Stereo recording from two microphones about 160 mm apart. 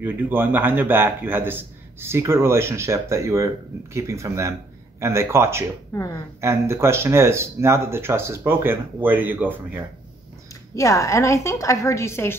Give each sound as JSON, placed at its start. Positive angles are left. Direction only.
{"t": 0.0, "sound": "a man's voice", "side_deg": -10}
{"t": 5.9, "sound": "a woman's voice", "side_deg": 20}
{"t": 6.4, "sound": "a man's voice", "side_deg": -15}
{"t": 10.7, "sound": "a woman's voice", "side_deg": 20}